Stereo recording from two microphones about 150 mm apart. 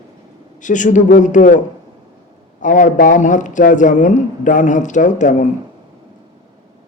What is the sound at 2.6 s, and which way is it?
Speech, 60° left (ahead or behind).